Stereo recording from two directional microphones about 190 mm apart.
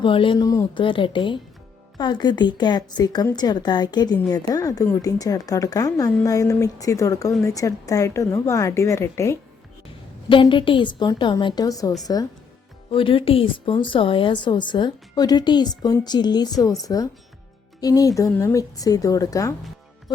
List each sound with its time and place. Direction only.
0.0 s a woman's voice: 25° left (ahead or behind)
10.2 s a woman's voice: 25° left (ahead or behind)